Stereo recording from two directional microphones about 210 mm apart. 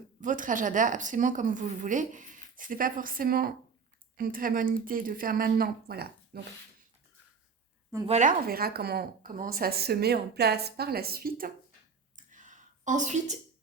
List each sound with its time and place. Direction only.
0.2 s a woman's voice: 40° right (ahead or behind)
8.0 s a woman's voice: 35° right (ahead or behind)
12.1 s a sound: 35° right (ahead or behind)